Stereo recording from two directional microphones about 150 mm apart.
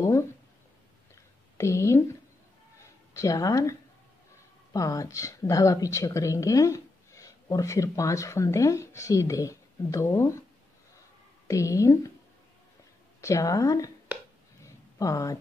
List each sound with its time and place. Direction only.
1.6 s a woman's voice: 20° left (ahead or behind)
2.8 s a sound: 20° left (ahead or behind)
4.7 s a woman's voice: 20° left (ahead or behind)
11.4 s a woman's voice: 20° left (ahead or behind)
13.2 s a woman's voice: 20° left (ahead or behind)
14.6 s a sound: 20° left (ahead or behind)